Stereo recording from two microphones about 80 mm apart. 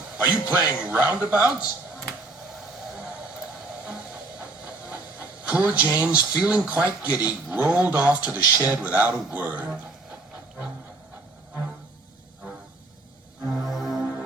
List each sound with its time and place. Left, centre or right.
0.3 s speech: centre
2.9 s vehicle: centre
3.8 s speech: centre
13.5 s music: centre